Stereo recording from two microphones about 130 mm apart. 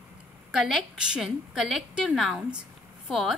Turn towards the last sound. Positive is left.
turn(degrees=0)  # may be behind; listen again after turning